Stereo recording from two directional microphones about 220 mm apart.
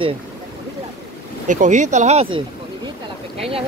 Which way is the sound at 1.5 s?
35° right (ahead or behind).